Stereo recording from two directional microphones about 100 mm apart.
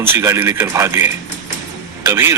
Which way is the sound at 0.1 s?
25° right (ahead or behind).